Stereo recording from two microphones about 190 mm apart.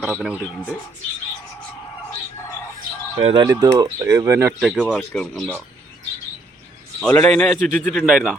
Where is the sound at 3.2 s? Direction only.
25° right (ahead or behind).